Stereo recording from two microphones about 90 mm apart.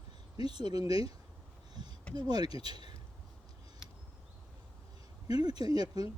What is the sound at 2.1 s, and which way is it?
Speech, 50° right (ahead or behind).